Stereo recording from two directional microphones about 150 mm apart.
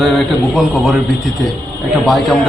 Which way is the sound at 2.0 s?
Centre (ahead or behind).